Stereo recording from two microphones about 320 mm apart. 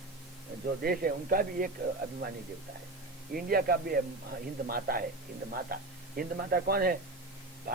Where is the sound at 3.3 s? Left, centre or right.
Right.